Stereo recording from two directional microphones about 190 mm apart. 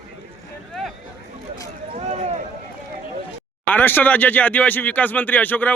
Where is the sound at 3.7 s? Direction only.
10° left (ahead or behind).